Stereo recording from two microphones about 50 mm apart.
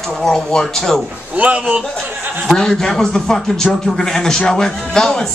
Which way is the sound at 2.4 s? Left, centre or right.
Centre.